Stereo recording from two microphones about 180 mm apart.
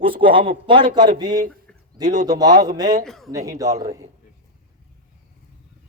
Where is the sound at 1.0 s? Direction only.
45° right (ahead or behind).